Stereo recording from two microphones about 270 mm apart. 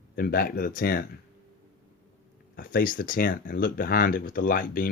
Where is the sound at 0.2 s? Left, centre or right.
Left.